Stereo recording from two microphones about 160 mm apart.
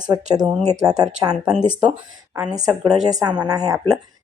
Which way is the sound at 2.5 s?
25° right (ahead or behind).